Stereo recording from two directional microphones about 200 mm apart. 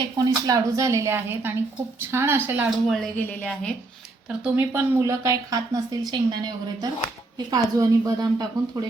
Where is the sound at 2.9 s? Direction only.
5° left (ahead or behind).